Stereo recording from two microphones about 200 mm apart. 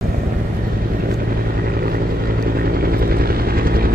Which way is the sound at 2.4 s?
50° right (ahead or behind).